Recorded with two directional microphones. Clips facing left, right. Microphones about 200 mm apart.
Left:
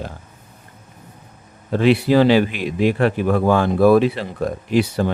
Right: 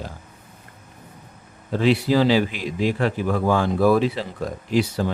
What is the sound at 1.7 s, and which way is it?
A man's voice, 60° left (ahead or behind).